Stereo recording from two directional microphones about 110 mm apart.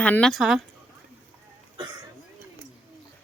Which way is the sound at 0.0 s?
10° left (ahead or behind).